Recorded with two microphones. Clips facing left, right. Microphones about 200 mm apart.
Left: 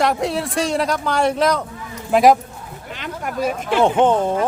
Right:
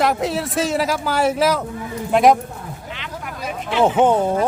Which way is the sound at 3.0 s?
45° left (ahead or behind).